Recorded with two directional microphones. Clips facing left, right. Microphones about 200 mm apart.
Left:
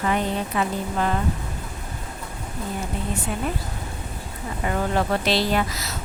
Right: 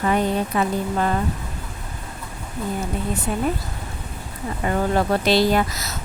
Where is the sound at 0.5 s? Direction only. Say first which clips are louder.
Right 2 dB; 40° right (ahead or behind).